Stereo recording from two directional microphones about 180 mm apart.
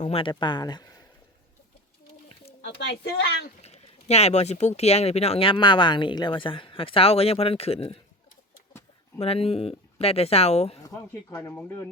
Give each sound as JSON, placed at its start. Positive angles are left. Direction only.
{"t": 0.0, "sound": "speech", "side_deg": 30}
{"t": 2.3, "sound": "a sound", "side_deg": 35}
{"t": 3.6, "sound": "speech", "side_deg": 35}
{"t": 9.2, "sound": "speech", "side_deg": 35}
{"t": 10.8, "sound": "speech", "side_deg": 15}